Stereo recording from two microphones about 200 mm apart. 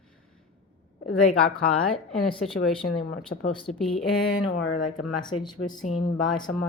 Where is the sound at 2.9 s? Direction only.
45° left (ahead or behind).